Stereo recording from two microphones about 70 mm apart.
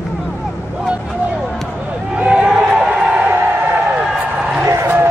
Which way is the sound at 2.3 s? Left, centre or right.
Centre.